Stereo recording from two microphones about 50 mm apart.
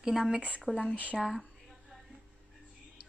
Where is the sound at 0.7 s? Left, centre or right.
Centre.